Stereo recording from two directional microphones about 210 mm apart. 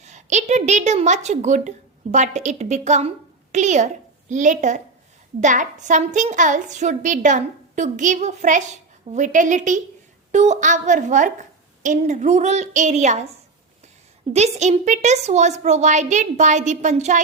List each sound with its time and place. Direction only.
0.0 s a woman's voice: 35° right (ahead or behind)
14.3 s a woman's voice: 30° right (ahead or behind)